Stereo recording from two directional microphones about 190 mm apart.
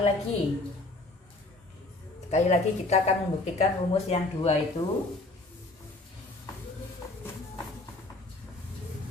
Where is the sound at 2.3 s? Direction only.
35° left (ahead or behind).